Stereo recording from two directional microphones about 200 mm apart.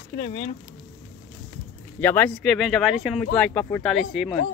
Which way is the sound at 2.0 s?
10° left (ahead or behind).